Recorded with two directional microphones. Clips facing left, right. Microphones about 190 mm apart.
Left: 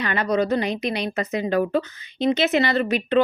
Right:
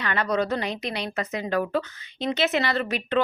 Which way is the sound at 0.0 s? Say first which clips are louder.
Left 3 dB; 15° left (ahead or behind).